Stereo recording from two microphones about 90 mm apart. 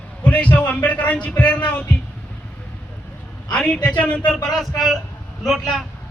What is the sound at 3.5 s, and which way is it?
Speech, 10° left (ahead or behind).